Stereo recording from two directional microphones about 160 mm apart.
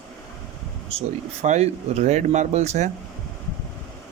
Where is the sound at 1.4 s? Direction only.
45° right (ahead or behind).